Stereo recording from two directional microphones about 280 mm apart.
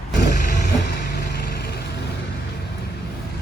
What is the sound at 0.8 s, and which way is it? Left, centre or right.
Vehicle, left.